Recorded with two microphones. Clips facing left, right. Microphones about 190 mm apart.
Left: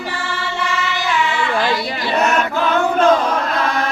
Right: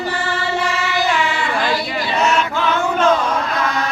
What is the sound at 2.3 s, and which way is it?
Choir, 35° left (ahead or behind).